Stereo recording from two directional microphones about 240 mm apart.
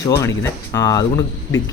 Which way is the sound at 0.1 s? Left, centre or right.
Centre.